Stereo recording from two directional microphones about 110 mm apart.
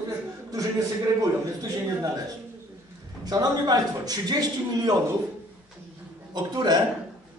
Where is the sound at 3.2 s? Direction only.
35° right (ahead or behind).